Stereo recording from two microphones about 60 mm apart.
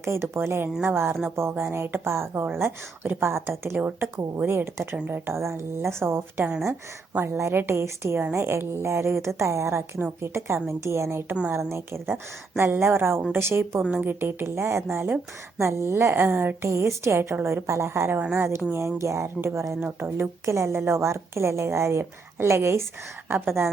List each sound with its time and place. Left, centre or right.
0.0 s a woman's voice: right
5.4 s a woman's voice: right
7.5 s speech: right
7.8 s a woman's voice: right
13.9 s speech: right
14.4 s a woman's voice: right
16.1 s a woman's voice: right
20.4 s a woman's voice: right